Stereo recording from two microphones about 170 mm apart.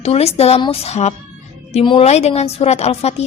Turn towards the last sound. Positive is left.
turn(degrees=40)  # may be behind; listen again after turning